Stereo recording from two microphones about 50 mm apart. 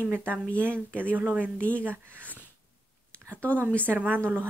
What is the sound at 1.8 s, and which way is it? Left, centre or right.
Speech, right.